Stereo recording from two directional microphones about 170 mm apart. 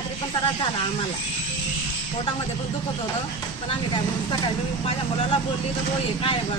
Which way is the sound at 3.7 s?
25° left (ahead or behind).